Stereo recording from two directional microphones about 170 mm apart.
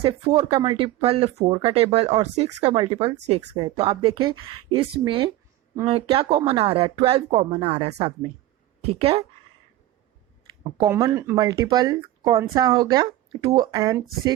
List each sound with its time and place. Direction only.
0.0 s speech: 30° right (ahead or behind)
10.6 s speech: 20° right (ahead or behind)